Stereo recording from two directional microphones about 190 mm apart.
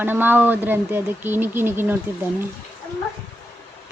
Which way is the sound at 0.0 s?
10° right (ahead or behind).